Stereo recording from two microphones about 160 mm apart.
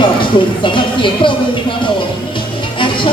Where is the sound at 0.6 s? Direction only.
30° left (ahead or behind).